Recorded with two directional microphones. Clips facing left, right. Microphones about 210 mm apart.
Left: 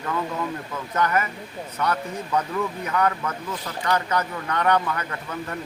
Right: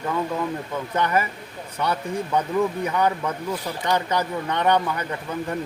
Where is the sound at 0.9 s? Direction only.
30° right (ahead or behind).